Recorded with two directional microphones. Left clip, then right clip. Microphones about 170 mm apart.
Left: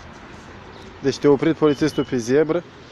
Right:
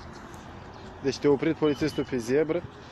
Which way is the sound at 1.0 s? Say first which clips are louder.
Left 7 dB; 40° left (ahead or behind).